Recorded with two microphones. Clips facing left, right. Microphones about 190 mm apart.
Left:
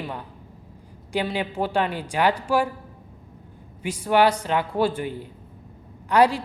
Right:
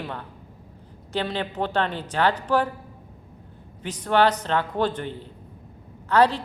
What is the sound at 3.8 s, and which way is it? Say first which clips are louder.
Speech: left 1 dB; 10° left (ahead or behind).